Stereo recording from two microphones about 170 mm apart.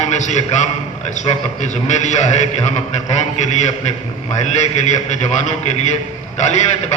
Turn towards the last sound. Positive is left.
turn(degrees=40)  # may be behind; listen again after turning